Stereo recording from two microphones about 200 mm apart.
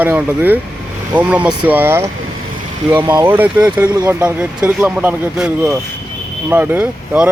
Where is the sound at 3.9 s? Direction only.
20° right (ahead or behind).